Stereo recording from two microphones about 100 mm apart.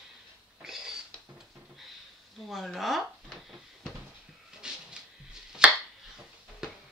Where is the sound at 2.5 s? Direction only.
Centre (ahead or behind).